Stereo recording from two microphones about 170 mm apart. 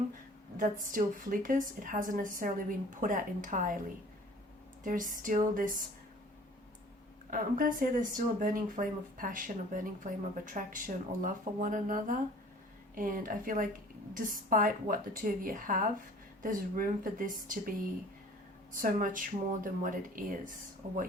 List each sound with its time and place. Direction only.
0.5 s speech: 50° right (ahead or behind)
7.3 s speech: 55° right (ahead or behind)